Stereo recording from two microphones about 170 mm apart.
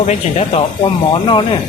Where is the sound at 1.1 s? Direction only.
30° left (ahead or behind).